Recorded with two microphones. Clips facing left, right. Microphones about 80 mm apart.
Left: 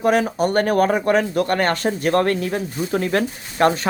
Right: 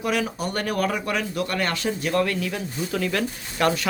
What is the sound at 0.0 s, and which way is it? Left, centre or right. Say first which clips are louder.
Speech: left 8 dB; left.